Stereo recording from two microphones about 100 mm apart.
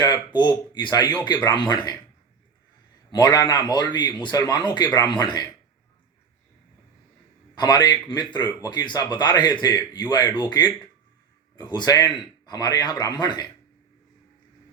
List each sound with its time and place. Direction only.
0.0 s speech: 45° left (ahead or behind)
3.1 s speech: 45° left (ahead or behind)
7.5 s speech: 40° left (ahead or behind)